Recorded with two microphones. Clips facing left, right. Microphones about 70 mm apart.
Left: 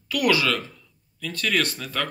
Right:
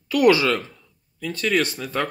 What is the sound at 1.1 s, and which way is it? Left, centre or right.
Speech, centre.